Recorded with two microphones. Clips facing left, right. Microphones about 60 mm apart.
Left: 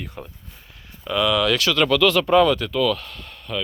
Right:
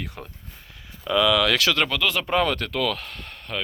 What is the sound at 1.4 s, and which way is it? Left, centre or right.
Speech, right.